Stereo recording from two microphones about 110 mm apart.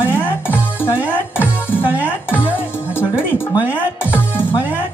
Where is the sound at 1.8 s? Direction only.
15° right (ahead or behind).